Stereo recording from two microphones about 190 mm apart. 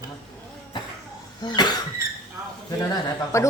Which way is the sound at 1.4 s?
20° left (ahead or behind).